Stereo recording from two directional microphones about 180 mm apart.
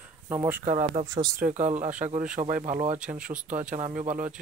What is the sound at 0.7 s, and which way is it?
Speech, 45° right (ahead or behind).